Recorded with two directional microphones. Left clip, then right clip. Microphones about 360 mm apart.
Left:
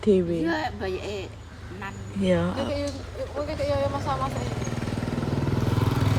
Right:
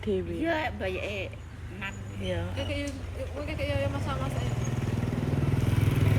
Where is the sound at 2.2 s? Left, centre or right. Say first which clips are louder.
Left 9 dB; left.